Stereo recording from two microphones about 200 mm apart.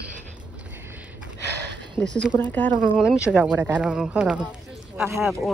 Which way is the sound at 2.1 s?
5° left (ahead or behind).